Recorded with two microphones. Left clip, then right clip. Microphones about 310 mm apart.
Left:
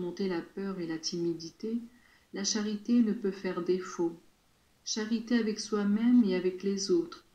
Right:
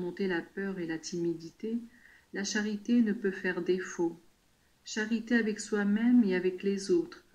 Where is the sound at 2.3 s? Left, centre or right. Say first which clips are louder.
Even; right.